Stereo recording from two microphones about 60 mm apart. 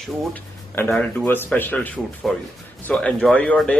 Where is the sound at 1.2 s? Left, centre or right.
Left.